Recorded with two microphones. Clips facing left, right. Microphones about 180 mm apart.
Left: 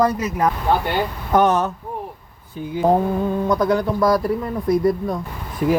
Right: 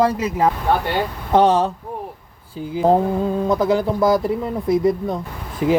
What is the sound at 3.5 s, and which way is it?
Speech, 25° right (ahead or behind).